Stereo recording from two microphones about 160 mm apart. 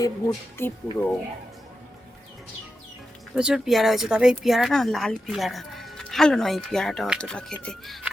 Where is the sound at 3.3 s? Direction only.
5° right (ahead or behind).